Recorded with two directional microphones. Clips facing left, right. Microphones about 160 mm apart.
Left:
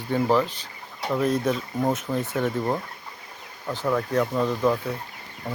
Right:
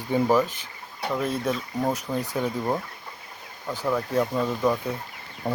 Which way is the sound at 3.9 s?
5° right (ahead or behind).